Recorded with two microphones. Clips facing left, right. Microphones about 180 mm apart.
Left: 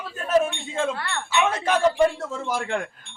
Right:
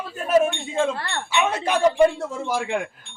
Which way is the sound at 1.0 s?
35° right (ahead or behind).